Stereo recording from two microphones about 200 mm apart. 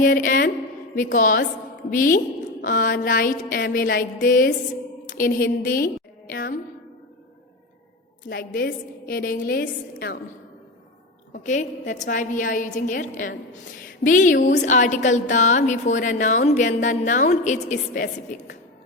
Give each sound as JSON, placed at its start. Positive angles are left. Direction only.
{"t": 0.0, "sound": "a woman's voice", "side_deg": 45}
{"t": 8.3, "sound": "a woman's voice", "side_deg": 50}
{"t": 11.3, "sound": "a woman's voice", "side_deg": 40}